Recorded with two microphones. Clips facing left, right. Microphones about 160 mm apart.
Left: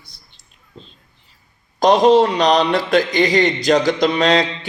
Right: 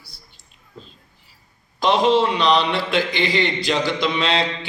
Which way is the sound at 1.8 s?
40° left (ahead or behind).